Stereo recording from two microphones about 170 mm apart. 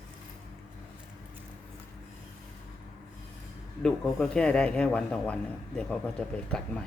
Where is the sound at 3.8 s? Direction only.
5° left (ahead or behind).